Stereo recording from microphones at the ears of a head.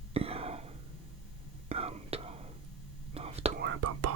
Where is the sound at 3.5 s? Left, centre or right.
Right.